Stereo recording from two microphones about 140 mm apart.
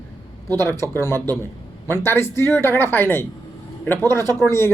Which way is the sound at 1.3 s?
15° left (ahead or behind).